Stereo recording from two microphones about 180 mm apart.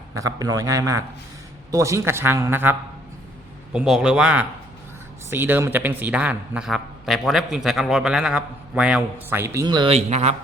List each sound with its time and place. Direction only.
0.1 s a man's voice: 20° right (ahead or behind); by 10.3 s 40° right (ahead or behind)